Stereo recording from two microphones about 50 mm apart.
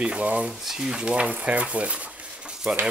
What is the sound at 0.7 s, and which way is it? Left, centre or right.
Speech, centre.